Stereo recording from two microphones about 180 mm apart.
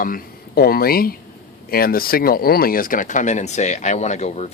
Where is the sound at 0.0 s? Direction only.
50° left (ahead or behind).